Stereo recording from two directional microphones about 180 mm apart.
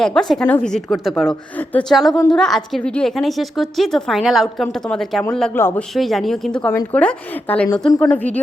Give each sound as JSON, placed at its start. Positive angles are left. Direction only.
{"t": 0.0, "sound": "a woman's voice", "side_deg": 5}
{"t": 5.9, "sound": "a woman's voice", "side_deg": 0}
{"t": 7.7, "sound": "a woman's voice", "side_deg": 20}
{"t": 8.1, "sound": "speech", "side_deg": 10}